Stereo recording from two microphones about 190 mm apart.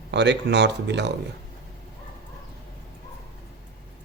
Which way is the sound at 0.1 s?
65° right (ahead or behind).